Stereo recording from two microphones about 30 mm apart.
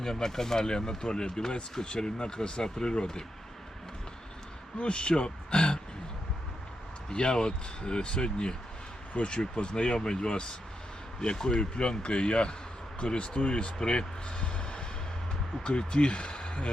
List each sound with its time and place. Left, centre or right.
0.0 s speech: centre
4.8 s speech: left
7.1 s speech: left